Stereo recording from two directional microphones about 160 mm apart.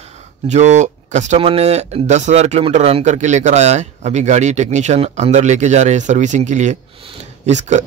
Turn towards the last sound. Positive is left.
turn(degrees=-45)  # may be behind; listen again after turning